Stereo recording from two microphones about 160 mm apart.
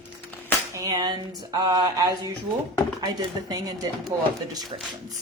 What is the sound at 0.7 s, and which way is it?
Speech, 25° right (ahead or behind).